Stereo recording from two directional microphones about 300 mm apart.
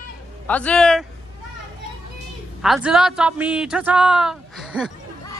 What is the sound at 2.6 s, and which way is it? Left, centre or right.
Speech, centre.